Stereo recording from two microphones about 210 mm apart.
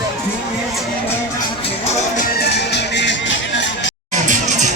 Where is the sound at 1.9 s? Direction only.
35° left (ahead or behind); by 3.9 s 60° left (ahead or behind).